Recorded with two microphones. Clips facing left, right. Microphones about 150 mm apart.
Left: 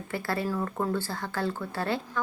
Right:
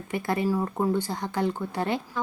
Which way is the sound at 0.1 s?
20° right (ahead or behind).